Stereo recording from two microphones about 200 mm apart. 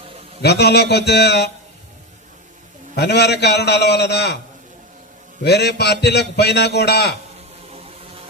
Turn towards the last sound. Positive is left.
turn(degrees=55)  # may be behind; listen again after turning